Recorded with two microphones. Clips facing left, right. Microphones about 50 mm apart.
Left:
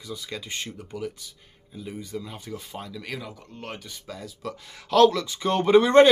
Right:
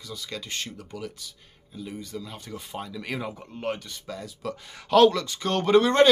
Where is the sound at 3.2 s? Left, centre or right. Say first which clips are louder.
Right 5 dB; right.